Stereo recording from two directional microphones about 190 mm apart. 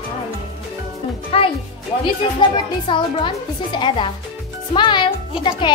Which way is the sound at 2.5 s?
25° left (ahead or behind).